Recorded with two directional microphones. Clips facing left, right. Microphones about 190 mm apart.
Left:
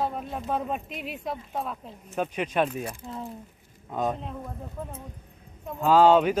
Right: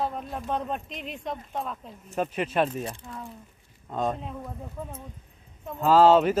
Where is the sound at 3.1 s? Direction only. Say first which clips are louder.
Left 4 dB; 25° left (ahead or behind).